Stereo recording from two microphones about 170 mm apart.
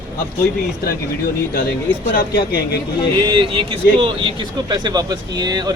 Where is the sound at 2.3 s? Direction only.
65° left (ahead or behind).